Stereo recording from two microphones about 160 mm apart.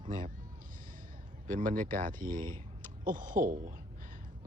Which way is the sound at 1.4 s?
55° right (ahead or behind).